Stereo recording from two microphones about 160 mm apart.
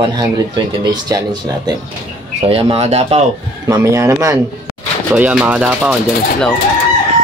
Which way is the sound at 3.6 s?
20° right (ahead or behind).